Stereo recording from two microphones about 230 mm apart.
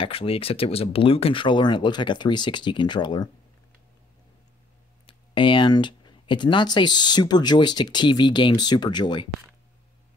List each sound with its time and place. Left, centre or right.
0.0 s speech: left
5.0 s speech: left